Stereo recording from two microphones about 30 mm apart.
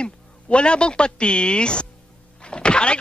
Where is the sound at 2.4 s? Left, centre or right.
Left.